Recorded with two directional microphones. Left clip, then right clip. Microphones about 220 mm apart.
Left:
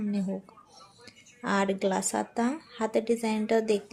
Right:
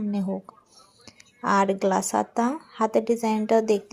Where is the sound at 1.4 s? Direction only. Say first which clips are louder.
Right 6 dB; 15° right (ahead or behind).